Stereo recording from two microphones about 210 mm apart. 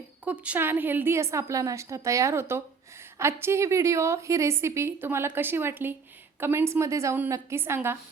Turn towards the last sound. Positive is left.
turn(degrees=-10)  # may be behind; listen again after turning